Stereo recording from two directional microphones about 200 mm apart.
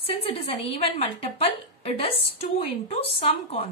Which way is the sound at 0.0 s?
30° left (ahead or behind).